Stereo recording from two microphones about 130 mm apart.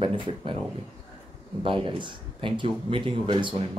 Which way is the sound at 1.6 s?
40° right (ahead or behind).